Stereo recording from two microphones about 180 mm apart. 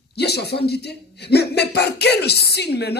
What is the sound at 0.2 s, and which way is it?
Speech, 65° left (ahead or behind).